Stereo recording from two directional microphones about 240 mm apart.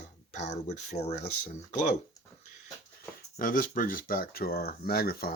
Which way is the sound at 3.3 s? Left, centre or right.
Left.